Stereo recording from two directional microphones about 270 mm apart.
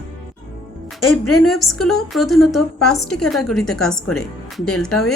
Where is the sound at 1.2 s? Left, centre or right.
Left.